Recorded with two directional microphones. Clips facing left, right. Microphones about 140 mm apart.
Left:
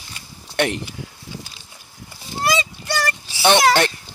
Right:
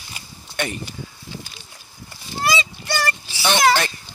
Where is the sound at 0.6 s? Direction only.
80° left.